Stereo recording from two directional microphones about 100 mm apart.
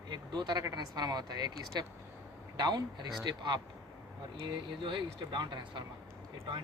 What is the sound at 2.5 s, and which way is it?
Speech, 40° right (ahead or behind).